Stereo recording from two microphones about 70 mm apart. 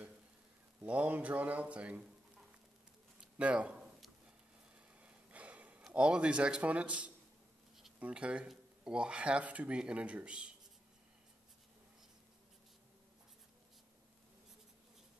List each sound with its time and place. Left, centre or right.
0.8 s speech: right
3.3 s speech: centre
5.0 s a sound: centre
5.9 s speech: centre